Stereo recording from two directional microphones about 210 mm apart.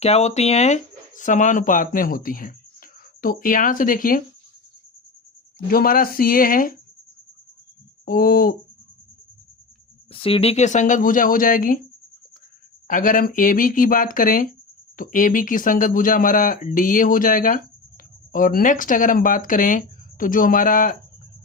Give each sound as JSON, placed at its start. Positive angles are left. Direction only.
{"t": 0.0, "sound": "speech", "side_deg": 30}
{"t": 5.7, "sound": "speech", "side_deg": 45}
{"t": 8.0, "sound": "speech", "side_deg": 45}
{"t": 10.1, "sound": "speech", "side_deg": 25}
{"t": 12.9, "sound": "speech", "side_deg": 40}